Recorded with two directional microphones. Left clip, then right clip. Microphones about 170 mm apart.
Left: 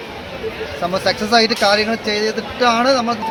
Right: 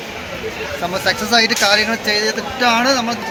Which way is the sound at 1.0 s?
90° left.